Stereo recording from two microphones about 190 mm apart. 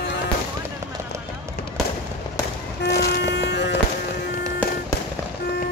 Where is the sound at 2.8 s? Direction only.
60° left (ahead or behind).